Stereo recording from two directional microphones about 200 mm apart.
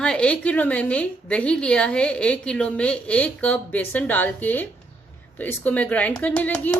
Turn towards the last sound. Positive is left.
turn(degrees=5)  # may be behind; listen again after turning